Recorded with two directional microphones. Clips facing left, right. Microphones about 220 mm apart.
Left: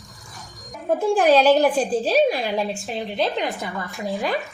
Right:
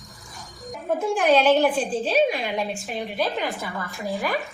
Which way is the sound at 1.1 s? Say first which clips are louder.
Left 2 dB; 35° left (ahead or behind).